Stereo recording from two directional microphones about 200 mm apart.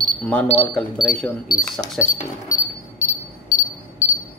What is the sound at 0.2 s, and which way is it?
Speech, 5° left (ahead or behind).